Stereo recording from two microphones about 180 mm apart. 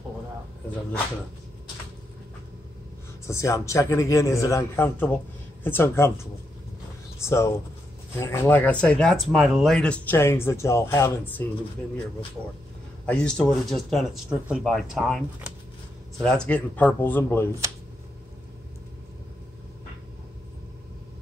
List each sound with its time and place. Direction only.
3.3 s speech: 15° left (ahead or behind)
7.2 s speech: 15° left (ahead or behind)
13.0 s speech: 5° left (ahead or behind)